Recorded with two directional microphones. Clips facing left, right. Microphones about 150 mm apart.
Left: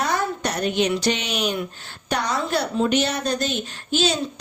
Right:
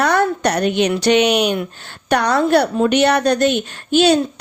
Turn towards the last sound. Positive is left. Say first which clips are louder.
# right 9 dB
turn(degrees=-60)  # may be behind; listen again after turning